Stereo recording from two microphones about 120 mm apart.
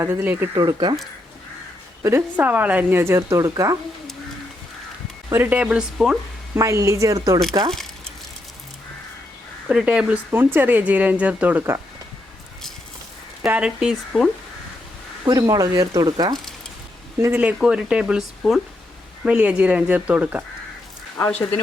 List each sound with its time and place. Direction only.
0.0 s speech: 15° right (ahead or behind)
0.5 s speech: 30° right (ahead or behind)
2.0 s a woman's voice: 25° right (ahead or behind)
2.3 s a woman's voice: 15° right (ahead or behind)
5.3 s speech: 15° right (ahead or behind)
6.6 s a woman's voice: 25° right (ahead or behind)
9.6 s speech: 10° right (ahead or behind)
13.4 s speech: 10° right (ahead or behind)
15.2 s speech: 30° right (ahead or behind)
17.2 s a woman's voice: 25° right (ahead or behind)
17.4 s speech: 5° right (ahead or behind)